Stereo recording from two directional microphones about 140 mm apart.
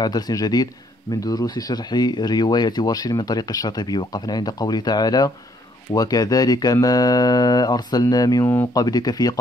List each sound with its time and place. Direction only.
0.0 s speech: 30° left (ahead or behind)